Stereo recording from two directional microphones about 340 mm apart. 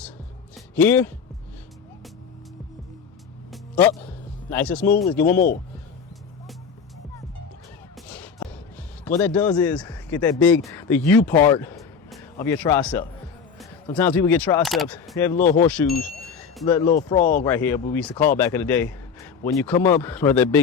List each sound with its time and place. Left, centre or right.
0.8 s speech: centre
3.5 s music: centre
4.4 s speech: centre
7.9 s a sound: centre
9.0 s a man's voice: centre